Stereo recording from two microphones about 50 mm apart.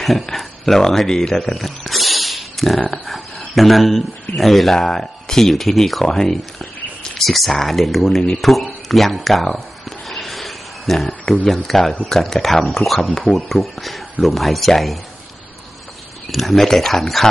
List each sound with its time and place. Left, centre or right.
0.0 s speech: centre
16.3 s speech: centre